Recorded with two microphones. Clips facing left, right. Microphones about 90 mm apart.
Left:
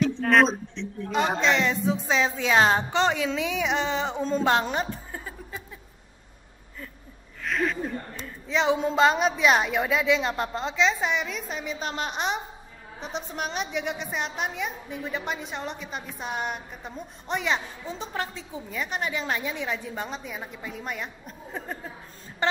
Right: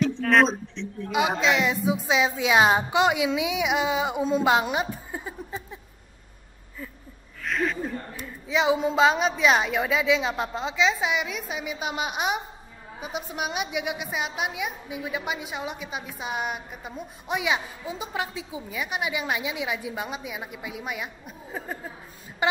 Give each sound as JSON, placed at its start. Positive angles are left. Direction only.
{"t": 0.3, "sound": "a woman's voice", "side_deg": 0}
{"t": 7.4, "sound": "a woman's voice", "side_deg": 0}